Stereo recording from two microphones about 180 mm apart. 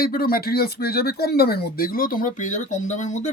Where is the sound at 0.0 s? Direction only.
55° left (ahead or behind).